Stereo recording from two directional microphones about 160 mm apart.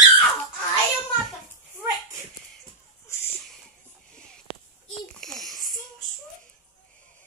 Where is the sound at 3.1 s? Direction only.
15° left (ahead or behind).